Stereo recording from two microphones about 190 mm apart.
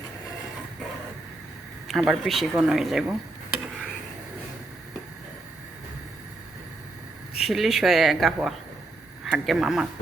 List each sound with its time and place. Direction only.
1.9 s speech: centre (ahead or behind)
7.3 s speech: centre (ahead or behind)